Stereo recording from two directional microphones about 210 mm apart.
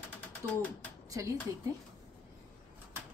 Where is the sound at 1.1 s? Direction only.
15° right (ahead or behind).